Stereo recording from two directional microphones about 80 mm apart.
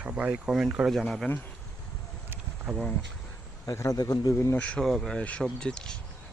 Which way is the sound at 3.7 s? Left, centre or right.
Left.